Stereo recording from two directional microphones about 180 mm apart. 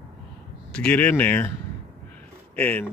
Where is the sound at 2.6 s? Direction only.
10° left (ahead or behind).